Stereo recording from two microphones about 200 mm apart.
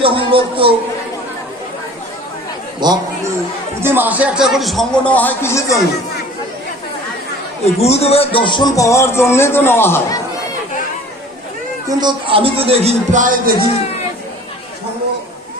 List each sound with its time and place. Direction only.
0.0 s a man's voice: 25° right (ahead or behind)
2.8 s a sound: 20° right (ahead or behind)
3.8 s a man's voice: 10° right (ahead or behind); by 5.8 s 15° left (ahead or behind)
7.8 s speech: 30° left (ahead or behind); by 10.2 s 10° left (ahead or behind)
11.9 s a man's voice: 20° right (ahead or behind); by 13.5 s 40° right (ahead or behind)